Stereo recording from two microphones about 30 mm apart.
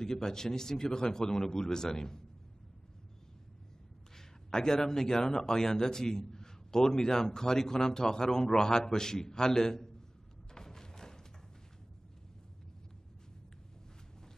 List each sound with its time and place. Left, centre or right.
0.0 s a man's voice: centre
4.2 s speech: centre
10.5 s a sound: centre